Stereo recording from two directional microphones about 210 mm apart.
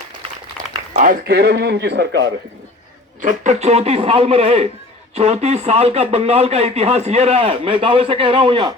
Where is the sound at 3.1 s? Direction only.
35° right (ahead or behind).